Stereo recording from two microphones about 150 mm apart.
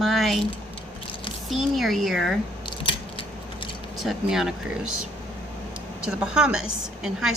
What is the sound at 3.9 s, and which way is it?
Speech, centre (ahead or behind).